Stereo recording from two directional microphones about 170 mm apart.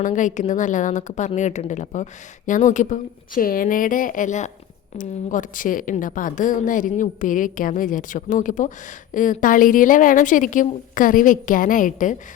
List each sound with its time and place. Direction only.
0.0 s a woman's voice: 50° left (ahead or behind)